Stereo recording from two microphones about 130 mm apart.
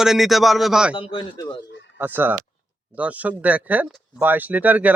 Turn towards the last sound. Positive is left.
turn(degrees=-10)  # may be behind; listen again after turning